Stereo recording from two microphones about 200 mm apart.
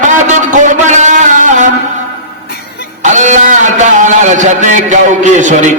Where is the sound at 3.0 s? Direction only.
40° right (ahead or behind).